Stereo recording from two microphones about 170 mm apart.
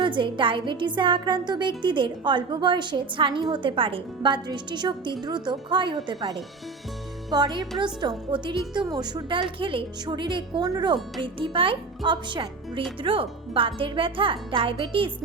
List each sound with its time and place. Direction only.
0.0 s music: 30° right (ahead or behind)
7.3 s music: 25° right (ahead or behind)
13.0 s speech: 30° right (ahead or behind)